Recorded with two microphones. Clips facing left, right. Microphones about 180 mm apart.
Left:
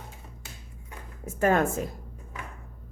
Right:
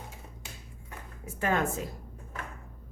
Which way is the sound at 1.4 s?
45° left (ahead or behind).